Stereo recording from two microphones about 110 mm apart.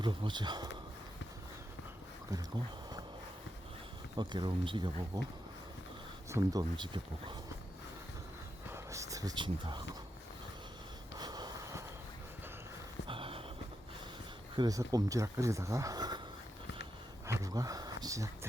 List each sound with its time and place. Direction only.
0.0 s speech: 45° right (ahead or behind)
4.2 s speech: 45° right (ahead or behind)
6.3 s speech: 35° right (ahead or behind)
8.7 s a sound: 30° right (ahead or behind)
9.3 s speech: 45° right (ahead or behind)
11.2 s a sound: 40° right (ahead or behind)
13.1 s a sound: 55° right (ahead or behind)
14.5 s speech: 45° right (ahead or behind)
14.8 s speech: 30° right (ahead or behind)
17.2 s speech: 30° right (ahead or behind)